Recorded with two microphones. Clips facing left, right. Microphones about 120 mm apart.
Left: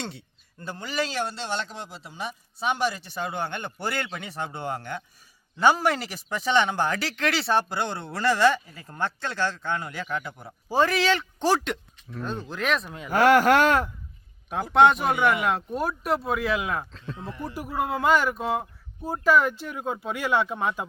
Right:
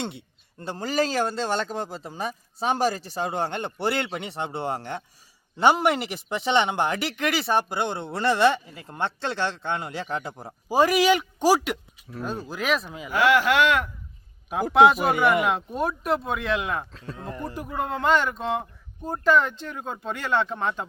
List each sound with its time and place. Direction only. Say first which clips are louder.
0.6 s speech: right 5 dB; 35° right (ahead or behind)
10.7 s speech: right 3 dB; 10° right (ahead or behind)
13.1 s speech: left 3 dB; 45° left (ahead or behind)
14.5 s speech: right 1 dB; centre (ahead or behind)
17.2 s speech: right 4 dB; 45° right (ahead or behind)
17.4 s speech: left 1 dB; 10° left (ahead or behind)